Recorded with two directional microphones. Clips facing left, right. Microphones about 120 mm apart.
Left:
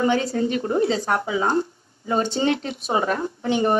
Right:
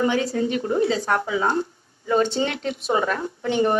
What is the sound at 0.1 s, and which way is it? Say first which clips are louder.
Speech: left 1 dB; 30° left (ahead or behind).